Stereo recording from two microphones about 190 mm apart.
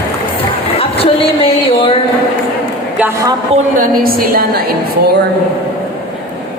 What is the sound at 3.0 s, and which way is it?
Speech, 15° right (ahead or behind).